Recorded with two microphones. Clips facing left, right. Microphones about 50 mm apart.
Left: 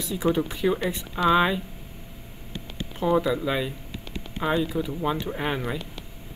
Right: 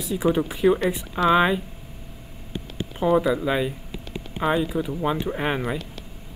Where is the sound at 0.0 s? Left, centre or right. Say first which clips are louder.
Right 2 dB; centre.